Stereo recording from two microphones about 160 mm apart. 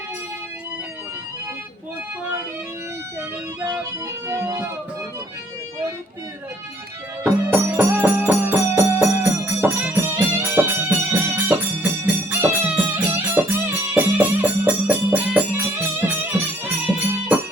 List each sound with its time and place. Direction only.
4.3 s speech: 15° right (ahead or behind)
7.3 s music: 15° right (ahead or behind)